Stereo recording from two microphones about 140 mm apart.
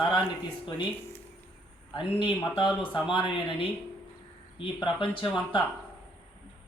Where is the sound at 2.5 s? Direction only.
35° left (ahead or behind).